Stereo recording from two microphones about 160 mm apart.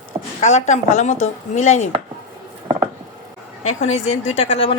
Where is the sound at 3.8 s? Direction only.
45° left (ahead or behind).